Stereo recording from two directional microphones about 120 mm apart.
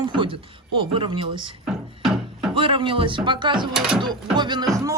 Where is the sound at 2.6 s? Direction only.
45° right (ahead or behind).